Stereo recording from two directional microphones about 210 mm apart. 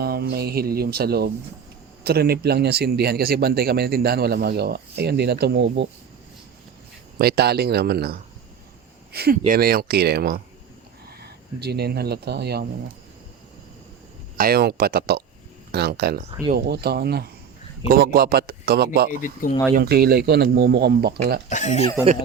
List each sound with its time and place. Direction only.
0.0 s a man's voice: 50° right (ahead or behind)
7.2 s a man's voice: 50° right (ahead or behind)
14.3 s a man's voice: 45° right (ahead or behind)
19.1 s speech: 40° left (ahead or behind)
19.7 s a man's voice: 45° right (ahead or behind)
21.5 s speech: 35° left (ahead or behind)